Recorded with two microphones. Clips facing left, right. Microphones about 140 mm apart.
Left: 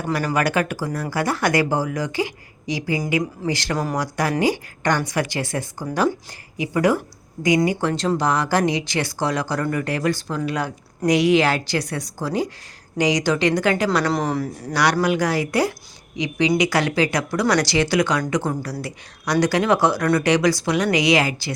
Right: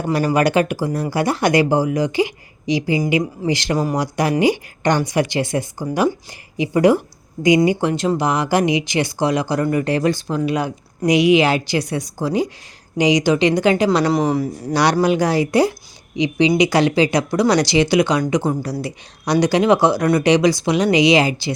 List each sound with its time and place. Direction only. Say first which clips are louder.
0.0 s speech: right 5 dB; 25° right (ahead or behind)
14.1 s speech: right 5 dB; 10° right (ahead or behind)
14.7 s speech: right 3 dB; 25° right (ahead or behind)